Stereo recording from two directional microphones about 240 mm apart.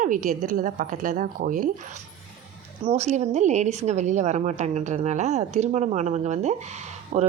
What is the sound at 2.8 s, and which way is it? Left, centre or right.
A woman's voice, right.